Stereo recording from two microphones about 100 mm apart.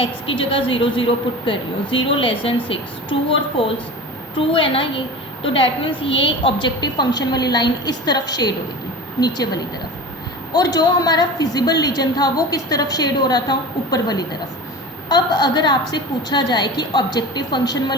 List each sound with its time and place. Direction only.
0.0 s a woman's voice: 60° left (ahead or behind); by 8.5 s 45° left (ahead or behind)
10.5 s a woman's voice: 40° left (ahead or behind)